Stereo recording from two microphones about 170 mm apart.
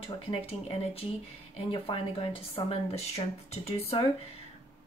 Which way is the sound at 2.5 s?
35° left (ahead or behind).